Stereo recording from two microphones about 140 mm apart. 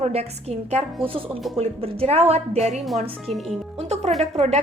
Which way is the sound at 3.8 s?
50° right (ahead or behind).